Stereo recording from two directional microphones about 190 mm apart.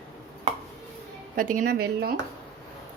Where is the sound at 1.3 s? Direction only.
50° right (ahead or behind).